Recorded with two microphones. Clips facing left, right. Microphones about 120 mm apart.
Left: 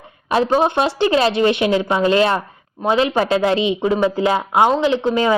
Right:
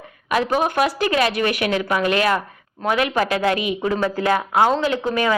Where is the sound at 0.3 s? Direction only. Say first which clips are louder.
Left 4 dB; 30° left (ahead or behind).